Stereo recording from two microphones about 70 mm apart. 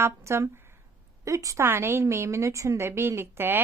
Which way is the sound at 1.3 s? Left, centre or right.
Right.